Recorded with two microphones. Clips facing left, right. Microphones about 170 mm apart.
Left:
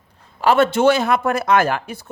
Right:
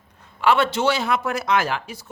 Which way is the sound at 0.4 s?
45° left (ahead or behind).